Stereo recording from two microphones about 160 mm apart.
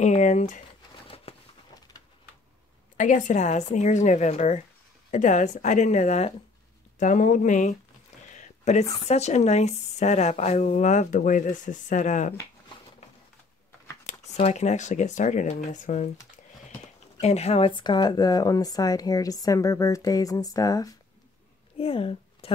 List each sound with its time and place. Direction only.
0.0 s speech: 50° left (ahead or behind)
1.0 s a sound: 40° left (ahead or behind)
3.0 s speech: 50° left (ahead or behind)
8.4 s a sound: 45° left (ahead or behind)
9.0 s speech: 45° left (ahead or behind)
14.0 s speech: 45° left (ahead or behind); by 21.0 s 20° left (ahead or behind)
21.7 s speech: 35° left (ahead or behind)